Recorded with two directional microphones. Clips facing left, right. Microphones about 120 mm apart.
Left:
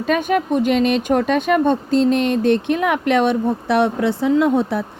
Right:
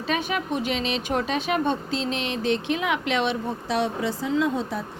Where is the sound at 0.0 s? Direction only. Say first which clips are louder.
Left 8 dB; 50° left (ahead or behind).